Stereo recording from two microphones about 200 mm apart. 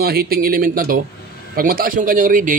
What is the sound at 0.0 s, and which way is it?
A man's voice, 50° right (ahead or behind).